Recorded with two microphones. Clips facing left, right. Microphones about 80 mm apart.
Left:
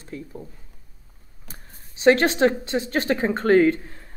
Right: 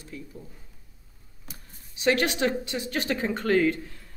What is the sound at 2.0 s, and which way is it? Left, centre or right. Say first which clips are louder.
Speech: left 7 dB; left.